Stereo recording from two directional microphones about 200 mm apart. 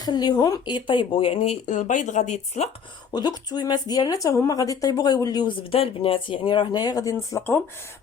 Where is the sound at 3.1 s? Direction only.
20° left (ahead or behind).